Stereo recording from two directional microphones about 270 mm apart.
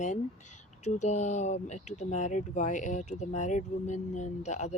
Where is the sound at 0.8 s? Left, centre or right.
Left.